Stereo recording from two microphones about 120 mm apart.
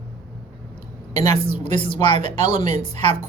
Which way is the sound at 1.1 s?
65° right (ahead or behind).